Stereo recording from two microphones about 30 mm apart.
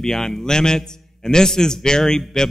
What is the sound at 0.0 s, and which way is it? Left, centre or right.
A man's voice, centre.